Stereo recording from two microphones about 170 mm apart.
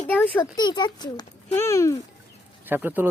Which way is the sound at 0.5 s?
25° left (ahead or behind).